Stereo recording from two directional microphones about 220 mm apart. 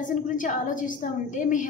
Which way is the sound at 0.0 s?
35° left (ahead or behind).